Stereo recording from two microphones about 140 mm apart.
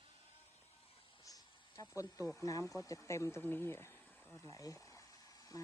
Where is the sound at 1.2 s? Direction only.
25° left (ahead or behind).